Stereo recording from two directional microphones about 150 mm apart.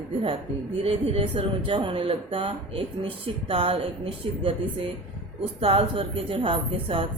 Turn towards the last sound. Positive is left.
turn(degrees=-35)  # may be behind; listen again after turning